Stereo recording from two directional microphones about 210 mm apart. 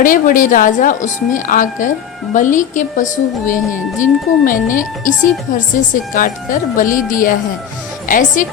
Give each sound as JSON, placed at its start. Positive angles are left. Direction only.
{"t": 0.0, "sound": "speech", "side_deg": 40}